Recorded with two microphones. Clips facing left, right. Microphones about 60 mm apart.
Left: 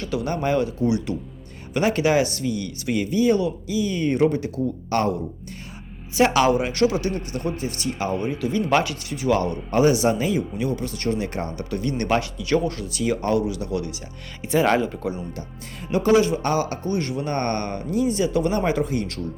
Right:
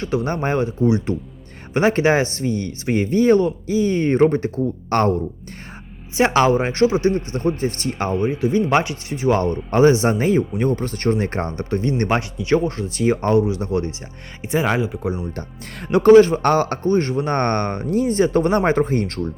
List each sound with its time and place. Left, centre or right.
0.0 s speech: right
6.1 s speech: right
8.2 s speech: right
14.6 s speech: centre
15.9 s a man's voice: right